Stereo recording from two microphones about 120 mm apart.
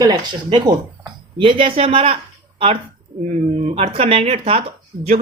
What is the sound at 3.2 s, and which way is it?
Speech, 70° right (ahead or behind).